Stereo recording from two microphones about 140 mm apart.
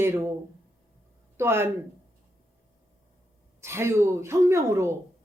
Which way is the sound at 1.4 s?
15° right (ahead or behind).